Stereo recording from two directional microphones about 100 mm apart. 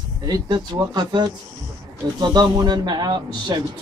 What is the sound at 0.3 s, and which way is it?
Speech, 50° right (ahead or behind).